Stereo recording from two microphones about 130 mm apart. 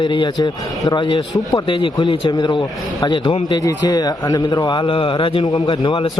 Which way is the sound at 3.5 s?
30° left (ahead or behind).